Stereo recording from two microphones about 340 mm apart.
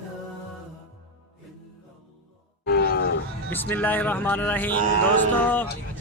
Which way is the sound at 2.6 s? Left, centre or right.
Left.